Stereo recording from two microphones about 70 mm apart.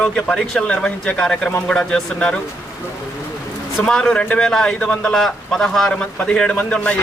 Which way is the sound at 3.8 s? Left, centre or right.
Centre.